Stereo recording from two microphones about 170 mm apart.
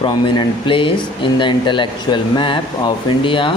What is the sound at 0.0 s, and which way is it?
Speech, 25° left (ahead or behind).